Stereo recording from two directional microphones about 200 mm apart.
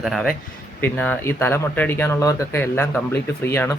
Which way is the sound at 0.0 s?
Centre (ahead or behind).